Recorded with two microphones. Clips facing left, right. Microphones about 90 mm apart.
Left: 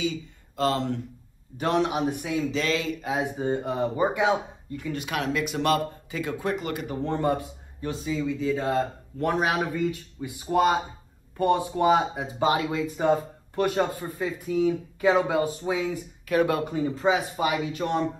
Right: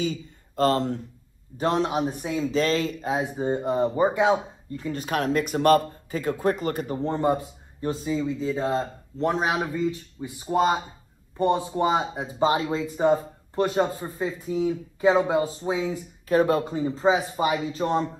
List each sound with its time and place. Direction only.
0.0 s speech: 45° right (ahead or behind); by 2.4 s 25° right (ahead or behind)
2.5 s speech: 40° right (ahead or behind)
3.3 s speech: 20° right (ahead or behind); by 7.0 s 40° right (ahead or behind)
7.0 s speech: 20° right (ahead or behind)
7.8 s speech: 35° right (ahead or behind)
8.2 s speech: 25° right (ahead or behind)